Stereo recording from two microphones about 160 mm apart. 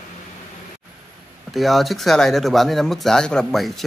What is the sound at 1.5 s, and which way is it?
Speech, centre (ahead or behind).